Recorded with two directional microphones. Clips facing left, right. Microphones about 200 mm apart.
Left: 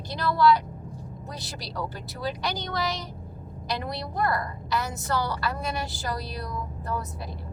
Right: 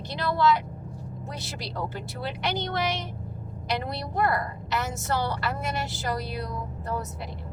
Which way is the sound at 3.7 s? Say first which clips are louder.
Right 1 dB; 25° right (ahead or behind).